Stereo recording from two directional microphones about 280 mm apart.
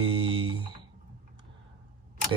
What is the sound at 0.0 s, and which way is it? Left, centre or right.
Music, centre.